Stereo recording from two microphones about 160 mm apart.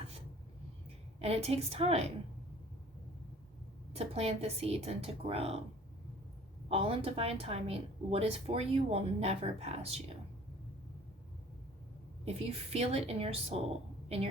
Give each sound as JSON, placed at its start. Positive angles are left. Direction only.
{"t": 1.2, "sound": "a woman's voice", "side_deg": -40}
{"t": 3.9, "sound": "a woman's voice", "side_deg": -40}
{"t": 6.7, "sound": "a woman's voice", "side_deg": -35}
{"t": 12.2, "sound": "a woman's voice", "side_deg": -40}